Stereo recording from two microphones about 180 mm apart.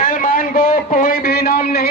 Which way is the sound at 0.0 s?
45° left (ahead or behind).